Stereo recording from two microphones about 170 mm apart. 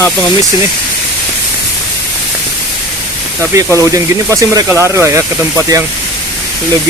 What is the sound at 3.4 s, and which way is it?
Speech, 20° right (ahead or behind).